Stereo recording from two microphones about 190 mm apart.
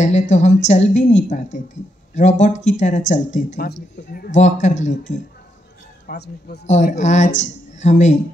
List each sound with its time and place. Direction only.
0.0 s speech: 35° left (ahead or behind)
2.1 s speech: 40° left (ahead or behind)
3.6 s speech: 50° left (ahead or behind)
6.0 s a man's voice: 60° left (ahead or behind)
6.7 s speech: 40° left (ahead or behind)